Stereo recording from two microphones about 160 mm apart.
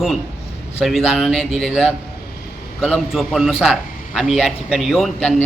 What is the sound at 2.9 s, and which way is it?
A man's voice, centre (ahead or behind).